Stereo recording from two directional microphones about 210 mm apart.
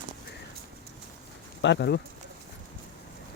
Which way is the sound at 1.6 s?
55° left (ahead or behind).